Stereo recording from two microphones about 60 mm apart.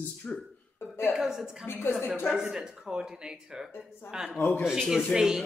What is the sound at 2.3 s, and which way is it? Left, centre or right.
A woman's voice, centre.